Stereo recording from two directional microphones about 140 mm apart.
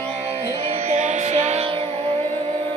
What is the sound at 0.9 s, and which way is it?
Music, 55° right (ahead or behind).